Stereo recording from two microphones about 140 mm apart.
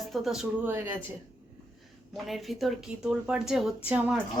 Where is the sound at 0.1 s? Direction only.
Centre (ahead or behind).